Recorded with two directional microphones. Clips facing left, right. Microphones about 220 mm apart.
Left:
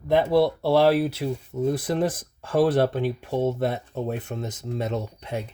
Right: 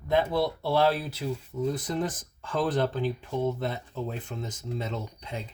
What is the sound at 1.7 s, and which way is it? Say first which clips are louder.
Speech: left 6 dB; 60° left (ahead or behind).